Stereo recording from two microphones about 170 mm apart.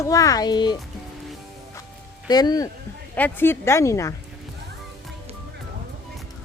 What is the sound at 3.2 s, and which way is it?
Speech, 10° left (ahead or behind).